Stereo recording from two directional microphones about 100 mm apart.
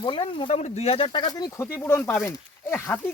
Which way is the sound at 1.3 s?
35° left (ahead or behind).